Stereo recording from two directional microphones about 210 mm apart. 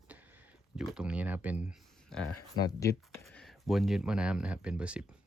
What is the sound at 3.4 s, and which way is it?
Speech, centre (ahead or behind).